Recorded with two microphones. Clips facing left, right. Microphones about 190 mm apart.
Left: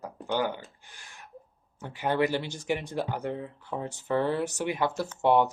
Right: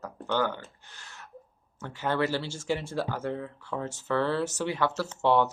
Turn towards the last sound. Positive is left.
turn(degrees=15)  # may be behind; listen again after turning